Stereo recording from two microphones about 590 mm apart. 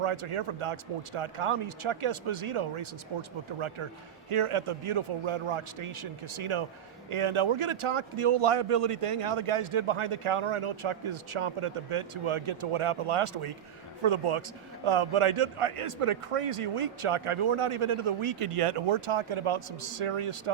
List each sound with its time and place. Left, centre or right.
0.0 s a man's voice: right